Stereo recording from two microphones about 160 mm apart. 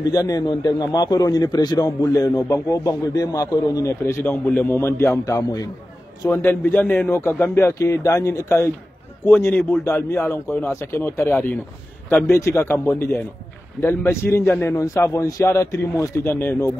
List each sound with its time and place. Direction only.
0.1 s a man's voice: 20° left (ahead or behind)